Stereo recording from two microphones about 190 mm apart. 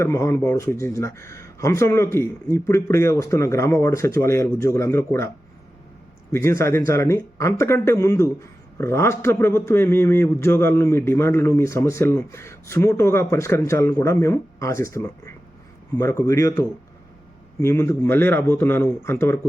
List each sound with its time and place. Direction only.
0.0 s a man's voice: 15° left (ahead or behind)
6.3 s a man's voice: 15° left (ahead or behind)
16.0 s a man's voice: 15° left (ahead or behind)